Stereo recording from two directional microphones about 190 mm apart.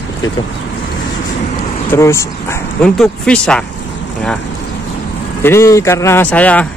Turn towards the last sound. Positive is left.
turn(degrees=5)  # may be behind; listen again after turning